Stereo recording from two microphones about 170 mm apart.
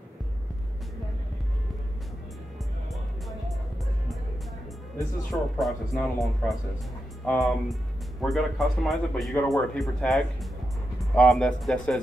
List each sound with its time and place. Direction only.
5.3 s speech: centre (ahead or behind)